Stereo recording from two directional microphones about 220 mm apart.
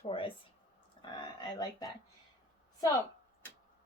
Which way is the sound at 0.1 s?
25° left (ahead or behind).